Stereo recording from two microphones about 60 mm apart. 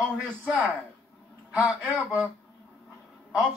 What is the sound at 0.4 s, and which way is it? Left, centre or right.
A man's voice, right.